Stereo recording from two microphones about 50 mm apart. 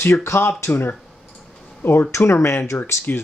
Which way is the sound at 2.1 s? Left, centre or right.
Left.